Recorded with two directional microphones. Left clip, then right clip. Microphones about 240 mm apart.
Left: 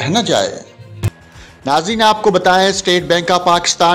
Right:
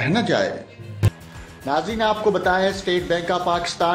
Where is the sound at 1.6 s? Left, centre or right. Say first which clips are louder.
Left 8 dB; left.